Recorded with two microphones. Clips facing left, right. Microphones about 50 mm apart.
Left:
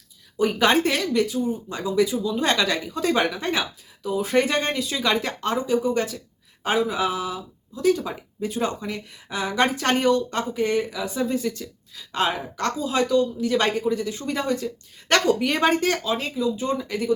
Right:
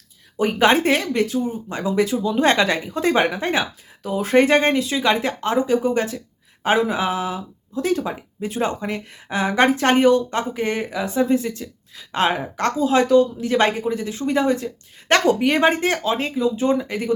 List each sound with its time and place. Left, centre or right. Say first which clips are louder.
0.3 s speech: right 3 dB; right
5.0 s speech: right 1 dB; centre
5.6 s speech: right 3 dB; right
9.9 s speech: right 5 dB; right
10.5 s speech: even; right
11.2 s speech: right 6 dB; right